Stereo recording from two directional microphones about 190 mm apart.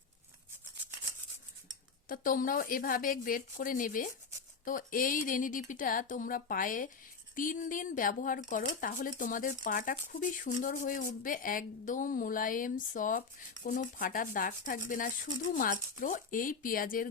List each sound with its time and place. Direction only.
2.0 s speech: 45° left (ahead or behind)